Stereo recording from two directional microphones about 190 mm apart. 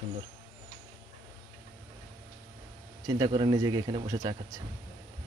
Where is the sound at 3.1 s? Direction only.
25° right (ahead or behind).